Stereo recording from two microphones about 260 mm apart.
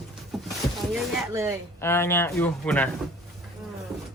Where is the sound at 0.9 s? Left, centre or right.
Centre.